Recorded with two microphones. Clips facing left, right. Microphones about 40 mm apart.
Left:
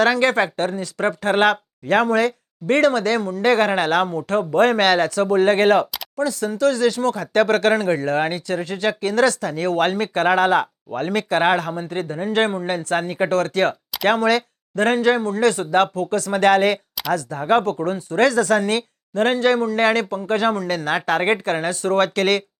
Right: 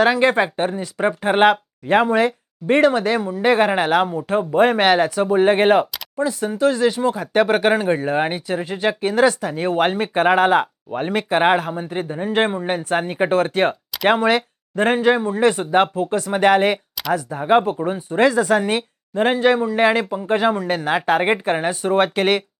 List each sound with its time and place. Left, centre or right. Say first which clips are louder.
0.0 s speech: right 1 dB; centre